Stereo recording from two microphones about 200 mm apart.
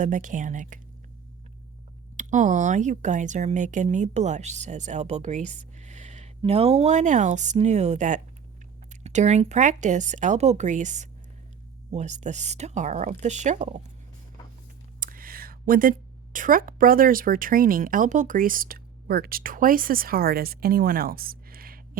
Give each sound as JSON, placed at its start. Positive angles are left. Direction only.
{"t": 0.0, "sound": "speech", "side_deg": -40}
{"t": 2.1, "sound": "speech", "side_deg": -35}
{"t": 15.0, "sound": "speech", "side_deg": -45}